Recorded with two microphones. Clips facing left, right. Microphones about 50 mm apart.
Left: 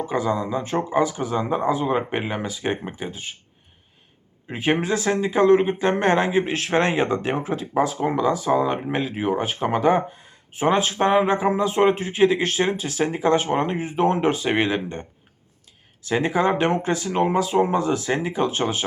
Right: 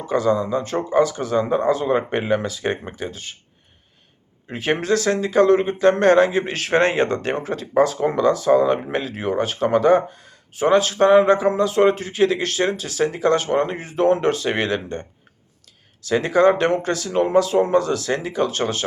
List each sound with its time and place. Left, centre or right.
0.1 s speech: centre
4.4 s speech: centre
6.7 s speech: centre
16.0 s speech: centre